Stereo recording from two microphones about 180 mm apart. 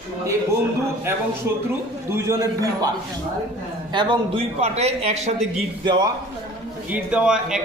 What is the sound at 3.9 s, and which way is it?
Speech, 30° right (ahead or behind).